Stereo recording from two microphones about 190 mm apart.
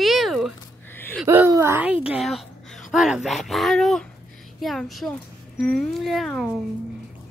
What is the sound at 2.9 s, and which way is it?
A child's voice, 5° right (ahead or behind).